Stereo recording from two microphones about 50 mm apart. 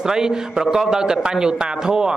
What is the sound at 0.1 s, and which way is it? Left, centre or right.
A man's voice, centre.